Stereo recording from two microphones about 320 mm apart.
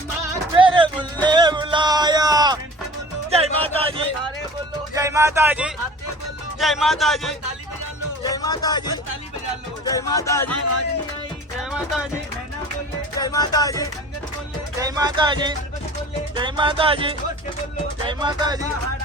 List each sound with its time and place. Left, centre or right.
0.6 s music: centre
3.2 s a sound: centre
4.9 s speech: centre
8.2 s speech: centre
13.1 s speech: centre
14.8 s music: centre